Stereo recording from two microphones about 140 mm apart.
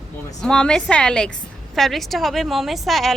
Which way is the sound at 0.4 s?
5° left (ahead or behind).